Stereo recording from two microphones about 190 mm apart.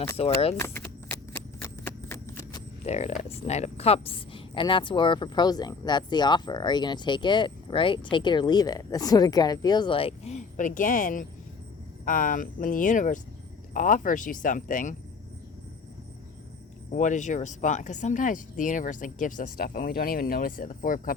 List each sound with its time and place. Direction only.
0.2 s speech: 30° left (ahead or behind)
0.6 s clip-clop: 15° left (ahead or behind)
2.8 s speech: 35° left (ahead or behind)
16.9 s speech: 40° left (ahead or behind)